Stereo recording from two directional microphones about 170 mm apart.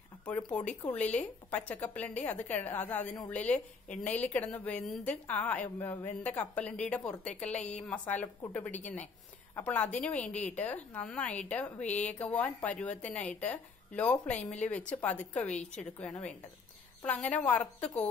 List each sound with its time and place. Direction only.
0.2 s a woman's voice: 5° left (ahead or behind)
9.6 s a woman's voice: 10° left (ahead or behind)
11.8 s speech: 45° left (ahead or behind)
12.1 s a woman's voice: 10° left (ahead or behind)